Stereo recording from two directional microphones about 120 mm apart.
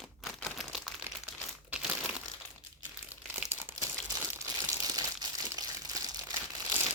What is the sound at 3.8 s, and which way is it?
Crumpling, 25° right (ahead or behind).